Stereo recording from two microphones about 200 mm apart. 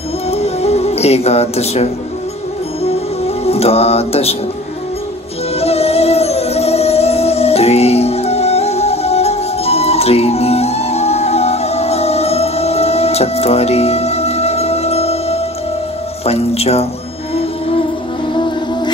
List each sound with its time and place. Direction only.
0.3 s music: 30° left (ahead or behind)
3.4 s music: 30° left (ahead or behind)
5.6 s music: 30° left (ahead or behind)